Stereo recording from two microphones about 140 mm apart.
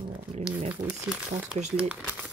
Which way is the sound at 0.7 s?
10° right (ahead or behind).